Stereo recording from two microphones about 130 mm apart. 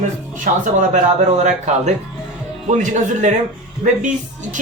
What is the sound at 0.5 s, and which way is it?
Speech, 90° right.